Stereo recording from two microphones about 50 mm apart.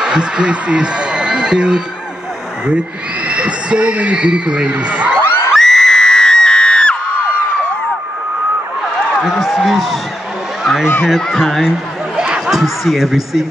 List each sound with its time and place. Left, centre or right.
0.0 s a man's voice: centre
3.3 s a man's voice: right
5.2 s crowd: left
5.5 s crowd: centre
9.2 s speech: centre
10.6 s a sound: centre
11.1 s speech: centre